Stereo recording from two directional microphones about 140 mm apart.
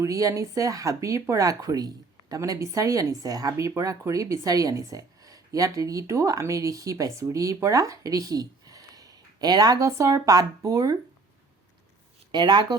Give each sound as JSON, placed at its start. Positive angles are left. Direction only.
{"t": 0.0, "sound": "speech", "side_deg": -25}
{"t": 12.3, "sound": "speech", "side_deg": -30}